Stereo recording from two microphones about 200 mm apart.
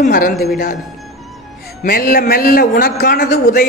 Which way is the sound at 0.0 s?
45° left (ahead or behind).